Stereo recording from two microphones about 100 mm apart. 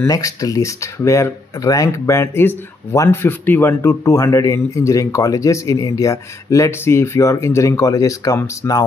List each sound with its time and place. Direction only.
0.0 s speech: 35° left (ahead or behind); by 3.9 s 20° left (ahead or behind)
4.0 s speech: 35° left (ahead or behind)